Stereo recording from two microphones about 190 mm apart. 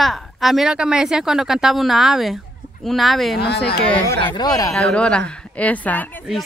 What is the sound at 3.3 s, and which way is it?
Speech, 60° left (ahead or behind).